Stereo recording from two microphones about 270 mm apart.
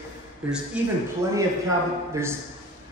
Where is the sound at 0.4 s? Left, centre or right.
Centre.